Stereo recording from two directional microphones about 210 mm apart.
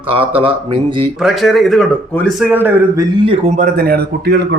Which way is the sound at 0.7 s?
25° right (ahead or behind).